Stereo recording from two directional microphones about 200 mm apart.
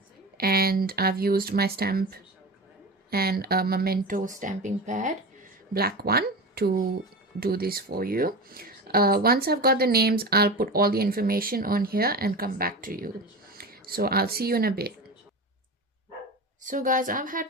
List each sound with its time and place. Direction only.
0.3 s speech: 50° right (ahead or behind)
16.6 s a woman's voice: 40° right (ahead or behind)